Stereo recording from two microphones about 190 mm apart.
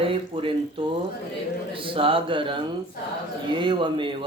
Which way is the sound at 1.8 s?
30° right (ahead or behind).